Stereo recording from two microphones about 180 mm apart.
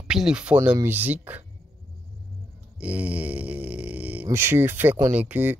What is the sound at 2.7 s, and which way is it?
Speech, 10° right (ahead or behind).